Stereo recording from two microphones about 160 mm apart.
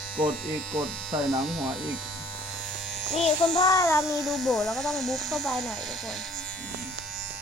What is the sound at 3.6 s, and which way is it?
Speech, 20° left (ahead or behind).